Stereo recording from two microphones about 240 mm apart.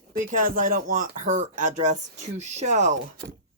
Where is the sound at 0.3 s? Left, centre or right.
Right.